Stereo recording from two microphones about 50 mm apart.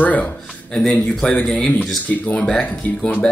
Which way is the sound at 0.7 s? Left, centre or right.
Centre.